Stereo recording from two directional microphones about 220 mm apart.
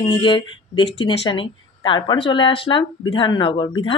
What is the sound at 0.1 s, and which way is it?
Speech, 20° left (ahead or behind).